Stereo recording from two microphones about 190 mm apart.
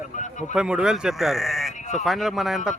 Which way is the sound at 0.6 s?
5° right (ahead or behind).